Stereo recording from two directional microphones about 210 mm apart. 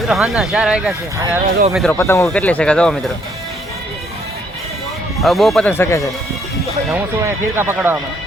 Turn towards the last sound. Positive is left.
turn(degrees=-10)  # may be behind; listen again after turning